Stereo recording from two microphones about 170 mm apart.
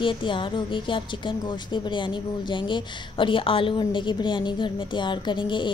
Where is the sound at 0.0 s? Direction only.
30° left (ahead or behind).